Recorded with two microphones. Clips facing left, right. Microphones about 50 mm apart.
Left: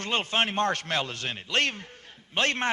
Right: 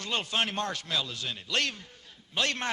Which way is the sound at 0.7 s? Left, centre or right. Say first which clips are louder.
Left 3 dB; left.